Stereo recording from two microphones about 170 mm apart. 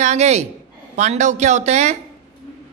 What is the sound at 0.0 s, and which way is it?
A man's voice, 40° right (ahead or behind).